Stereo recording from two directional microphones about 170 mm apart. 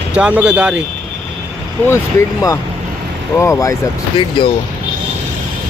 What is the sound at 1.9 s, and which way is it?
Speech, 20° left (ahead or behind).